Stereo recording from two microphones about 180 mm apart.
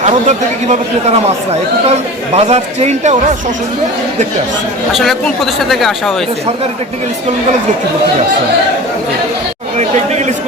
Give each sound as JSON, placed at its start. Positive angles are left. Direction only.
{"t": 0.0, "sound": "speech", "side_deg": -40}
{"t": 2.3, "sound": "speech", "side_deg": -35}
{"t": 4.9, "sound": "speech", "side_deg": 0}
{"t": 9.7, "sound": "speech", "side_deg": -40}